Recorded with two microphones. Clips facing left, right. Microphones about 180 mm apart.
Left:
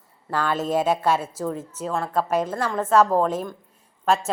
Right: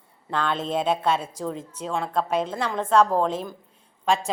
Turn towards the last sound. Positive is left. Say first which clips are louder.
# left 2 dB
turn(degrees=5)  # may be behind; listen again after turning